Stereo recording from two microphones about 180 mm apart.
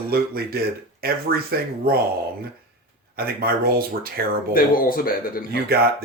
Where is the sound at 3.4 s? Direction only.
55° right (ahead or behind).